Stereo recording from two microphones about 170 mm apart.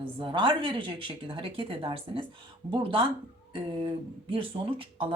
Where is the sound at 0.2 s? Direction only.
30° right (ahead or behind).